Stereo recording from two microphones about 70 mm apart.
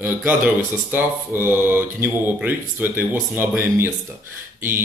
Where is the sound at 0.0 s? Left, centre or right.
Right.